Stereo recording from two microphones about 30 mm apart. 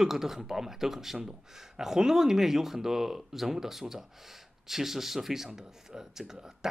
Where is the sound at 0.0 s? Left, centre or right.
Centre.